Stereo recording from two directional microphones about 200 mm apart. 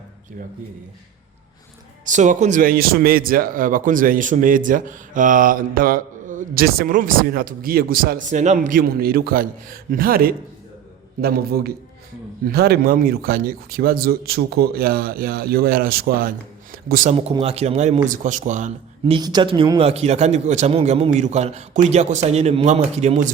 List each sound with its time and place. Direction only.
2.0 s a man's voice: 40° right (ahead or behind)
19.1 s speech: 20° right (ahead or behind)
19.9 s a man's voice: 35° right (ahead or behind)